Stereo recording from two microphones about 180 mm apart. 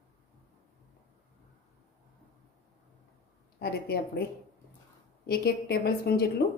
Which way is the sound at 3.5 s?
60° left (ahead or behind).